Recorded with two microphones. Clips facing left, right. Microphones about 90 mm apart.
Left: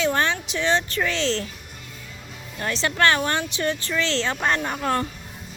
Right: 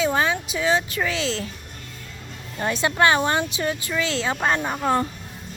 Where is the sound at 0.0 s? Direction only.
5° right (ahead or behind).